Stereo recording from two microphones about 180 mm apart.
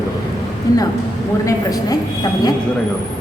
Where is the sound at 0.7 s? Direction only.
20° left (ahead or behind).